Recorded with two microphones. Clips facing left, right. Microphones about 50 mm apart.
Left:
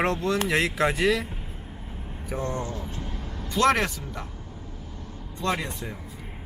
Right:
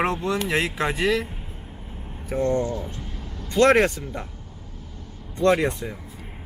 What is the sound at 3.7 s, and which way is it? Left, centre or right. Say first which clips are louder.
Speech: right 7 dB; right.